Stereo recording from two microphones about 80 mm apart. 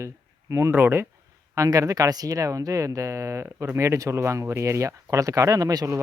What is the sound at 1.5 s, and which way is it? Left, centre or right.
Speech, right.